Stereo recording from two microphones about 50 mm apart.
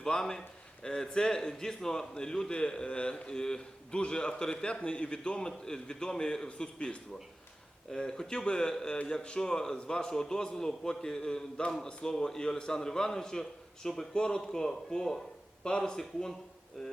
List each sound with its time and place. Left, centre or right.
0.0 s a man's voice: centre